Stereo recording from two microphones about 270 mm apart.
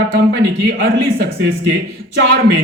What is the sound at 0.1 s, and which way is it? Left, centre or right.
A man's voice, right.